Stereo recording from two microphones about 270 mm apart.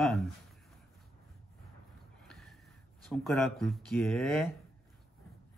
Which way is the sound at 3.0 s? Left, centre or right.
Centre.